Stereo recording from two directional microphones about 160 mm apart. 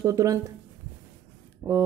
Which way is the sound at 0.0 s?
20° right (ahead or behind).